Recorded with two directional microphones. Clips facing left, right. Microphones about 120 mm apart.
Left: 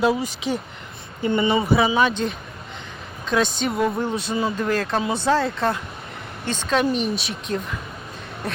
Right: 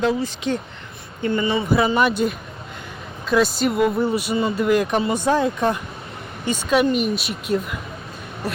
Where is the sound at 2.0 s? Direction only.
10° right (ahead or behind).